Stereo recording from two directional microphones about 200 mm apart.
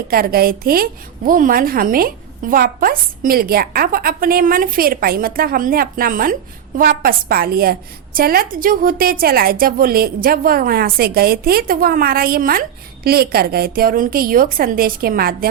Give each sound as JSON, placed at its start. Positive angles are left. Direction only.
{"t": 0.1, "sound": "a woman's voice", "side_deg": -50}